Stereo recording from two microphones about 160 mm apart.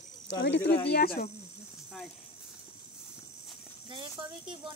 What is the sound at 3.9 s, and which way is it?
Speech, 30° right (ahead or behind).